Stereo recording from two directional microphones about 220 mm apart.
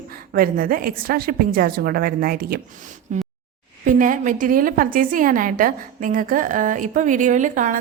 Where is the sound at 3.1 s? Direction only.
35° right (ahead or behind).